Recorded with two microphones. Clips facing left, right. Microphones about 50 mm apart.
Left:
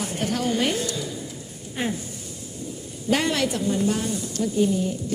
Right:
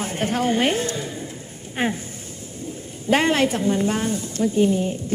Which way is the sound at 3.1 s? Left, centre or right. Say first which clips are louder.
Right 4 dB; right.